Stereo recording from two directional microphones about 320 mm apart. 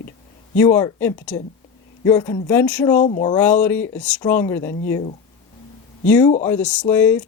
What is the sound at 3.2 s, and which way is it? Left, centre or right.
Speech, centre.